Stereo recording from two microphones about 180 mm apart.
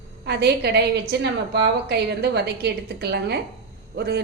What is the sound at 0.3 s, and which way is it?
A woman's voice, 65° right (ahead or behind).